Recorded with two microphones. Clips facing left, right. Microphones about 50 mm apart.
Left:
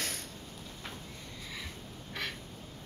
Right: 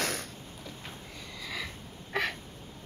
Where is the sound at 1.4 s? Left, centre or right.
Right.